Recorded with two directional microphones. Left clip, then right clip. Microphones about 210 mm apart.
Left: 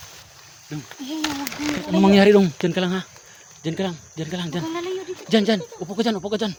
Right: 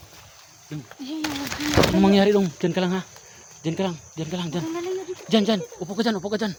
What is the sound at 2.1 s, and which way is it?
Speech, 30° left (ahead or behind).